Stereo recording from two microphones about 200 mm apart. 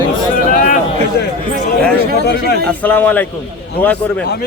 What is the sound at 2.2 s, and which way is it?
Speech, 55° left (ahead or behind).